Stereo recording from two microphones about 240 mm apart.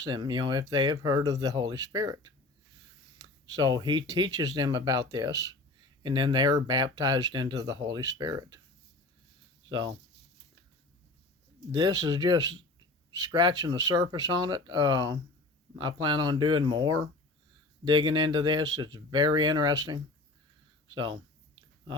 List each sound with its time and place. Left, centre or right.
0.0 s speech: centre
9.6 s speech: centre
11.7 s speech: centre
20.9 s a sound: centre